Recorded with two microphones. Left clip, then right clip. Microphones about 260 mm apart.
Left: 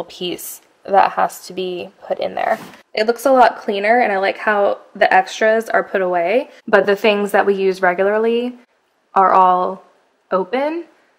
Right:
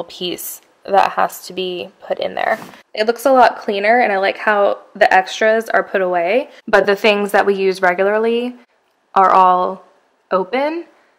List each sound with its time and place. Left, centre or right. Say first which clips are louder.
0.0 s a woman's voice: right 1 dB; centre